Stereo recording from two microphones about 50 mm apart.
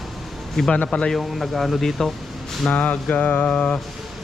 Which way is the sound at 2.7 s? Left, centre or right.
Left.